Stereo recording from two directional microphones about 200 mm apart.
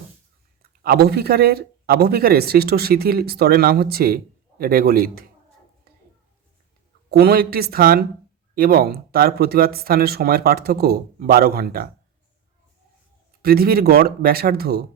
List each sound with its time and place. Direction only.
0.6 s speech: 50° right (ahead or behind)
7.1 s speech: 50° right (ahead or behind)
13.4 s speech: 50° right (ahead or behind)